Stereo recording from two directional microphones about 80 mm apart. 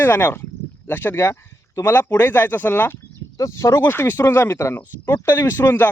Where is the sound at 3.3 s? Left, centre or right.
Left.